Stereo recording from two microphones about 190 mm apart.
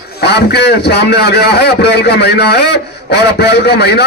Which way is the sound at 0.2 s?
60° left (ahead or behind).